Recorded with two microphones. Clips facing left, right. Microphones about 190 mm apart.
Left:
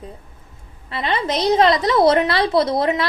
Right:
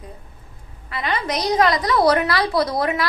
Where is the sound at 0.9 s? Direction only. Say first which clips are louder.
Left 2 dB; 25° left (ahead or behind).